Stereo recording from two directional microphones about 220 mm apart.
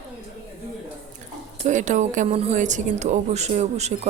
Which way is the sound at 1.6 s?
35° right (ahead or behind).